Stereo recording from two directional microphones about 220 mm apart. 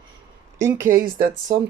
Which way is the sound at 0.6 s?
35° right (ahead or behind).